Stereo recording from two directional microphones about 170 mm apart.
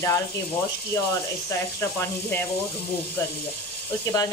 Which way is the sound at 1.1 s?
15° left (ahead or behind).